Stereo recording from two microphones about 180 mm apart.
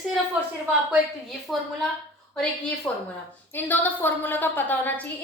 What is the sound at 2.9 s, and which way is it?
A woman's voice, 5° left (ahead or behind).